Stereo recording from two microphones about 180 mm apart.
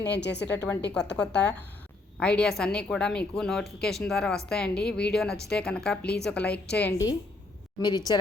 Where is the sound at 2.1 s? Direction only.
5° left (ahead or behind).